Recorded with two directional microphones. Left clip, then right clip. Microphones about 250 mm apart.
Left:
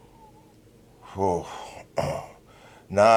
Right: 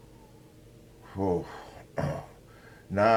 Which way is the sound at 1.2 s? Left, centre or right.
Left.